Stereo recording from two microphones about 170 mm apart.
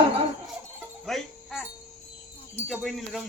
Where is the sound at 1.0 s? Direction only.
Centre (ahead or behind).